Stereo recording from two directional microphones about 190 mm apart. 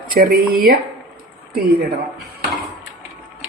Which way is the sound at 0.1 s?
50° right (ahead or behind).